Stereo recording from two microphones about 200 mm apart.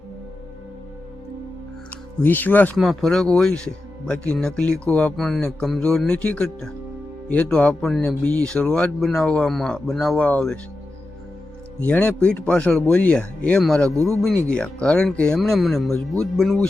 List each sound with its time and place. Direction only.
2.2 s speech: 10° left (ahead or behind)
11.8 s speech: 5° left (ahead or behind)
13.9 s speech: 15° right (ahead or behind)
14.4 s speech: 5° left (ahead or behind)